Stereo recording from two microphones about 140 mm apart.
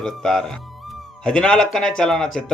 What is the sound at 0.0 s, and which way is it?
Speech, 5° left (ahead or behind).